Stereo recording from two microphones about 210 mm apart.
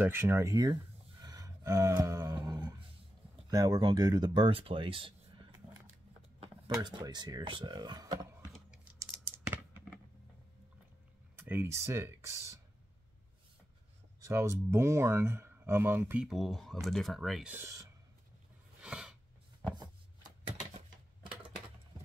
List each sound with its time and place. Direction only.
0.0 s speech: 10° right (ahead or behind)
1.2 s a sound: 15° right (ahead or behind)
3.4 s speech: 20° right (ahead or behind)
6.4 s speech: 20° right (ahead or behind)
8.6 s scissors: 5° right (ahead or behind)
11.3 s speech: 10° right (ahead or behind)
14.2 s speech: 15° right (ahead or behind)
18.8 s a sound: 5° right (ahead or behind)